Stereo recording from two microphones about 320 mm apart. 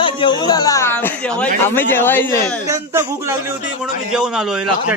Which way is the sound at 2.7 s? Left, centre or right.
Centre.